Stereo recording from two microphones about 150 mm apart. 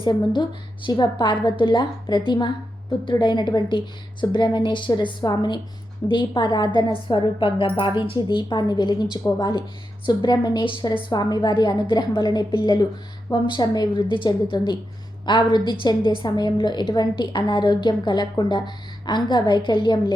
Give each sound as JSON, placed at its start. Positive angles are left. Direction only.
{"t": 0.0, "sound": "a woman's voice", "side_deg": 30}